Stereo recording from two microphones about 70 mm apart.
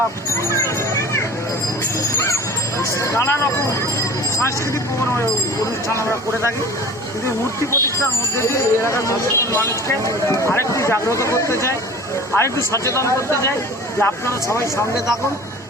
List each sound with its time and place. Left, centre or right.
0.5 s a sound: left
2.7 s speech: left
5.9 s speech: left